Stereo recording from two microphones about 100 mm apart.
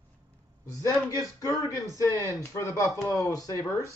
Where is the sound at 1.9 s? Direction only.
30° left (ahead or behind).